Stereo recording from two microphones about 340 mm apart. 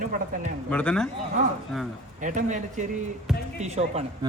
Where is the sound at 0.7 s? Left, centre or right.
Centre.